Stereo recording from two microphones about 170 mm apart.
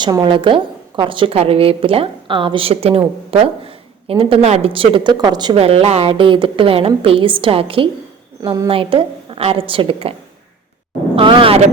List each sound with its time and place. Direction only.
0.0 s speech: 30° right (ahead or behind)
8.4 s a woman's voice: 20° right (ahead or behind)
8.7 s speech: 30° right (ahead or behind)